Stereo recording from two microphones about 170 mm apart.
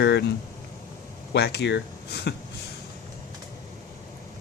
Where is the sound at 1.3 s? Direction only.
80° left.